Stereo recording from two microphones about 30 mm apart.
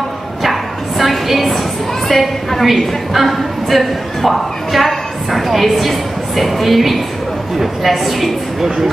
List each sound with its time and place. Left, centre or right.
0.4 s bow-wow: centre
2.0 s a woman's voice: centre